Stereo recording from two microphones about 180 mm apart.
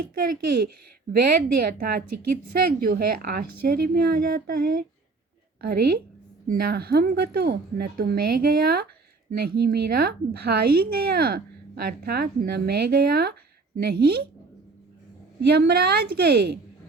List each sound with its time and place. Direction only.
0.0 s a woman's voice: 55° right (ahead or behind)
15.4 s a woman's voice: 65° right (ahead or behind)